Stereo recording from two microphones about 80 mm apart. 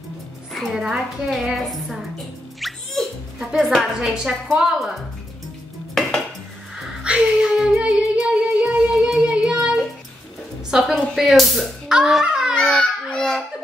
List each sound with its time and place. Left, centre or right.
0.5 s a woman's voice: centre
2.6 s music: centre
3.3 s a woman's voice: centre
7.0 s music: centre
10.7 s a woman's voice: centre
12.5 s baby cry: centre